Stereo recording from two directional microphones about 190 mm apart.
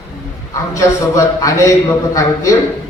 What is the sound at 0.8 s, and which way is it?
A man's voice, 15° left (ahead or behind).